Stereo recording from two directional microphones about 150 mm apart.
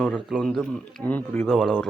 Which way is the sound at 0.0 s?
Centre (ahead or behind).